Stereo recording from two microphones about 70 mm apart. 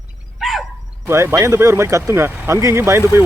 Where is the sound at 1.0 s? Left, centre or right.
Right.